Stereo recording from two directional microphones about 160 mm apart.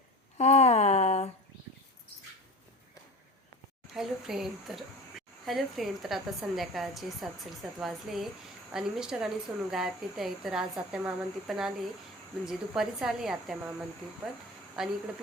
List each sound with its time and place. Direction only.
0.3 s a sound: 45° left (ahead or behind)
3.9 s a woman's voice: 5° right (ahead or behind)
14.8 s a woman's voice: 5° right (ahead or behind)